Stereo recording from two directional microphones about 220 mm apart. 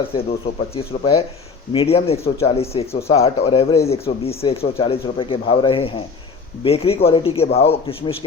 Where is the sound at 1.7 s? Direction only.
25° left (ahead or behind).